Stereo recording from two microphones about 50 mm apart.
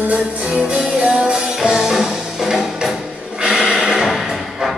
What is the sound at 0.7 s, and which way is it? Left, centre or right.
Music, right.